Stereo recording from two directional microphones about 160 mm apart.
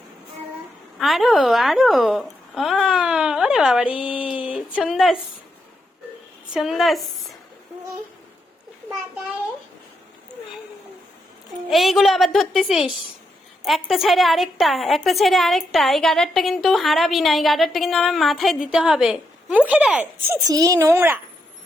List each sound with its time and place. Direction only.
0.9 s a sound: centre (ahead or behind)
6.5 s a woman's voice: centre (ahead or behind)
11.7 s a woman's voice: centre (ahead or behind)
20.5 s a woman's voice: 20° right (ahead or behind)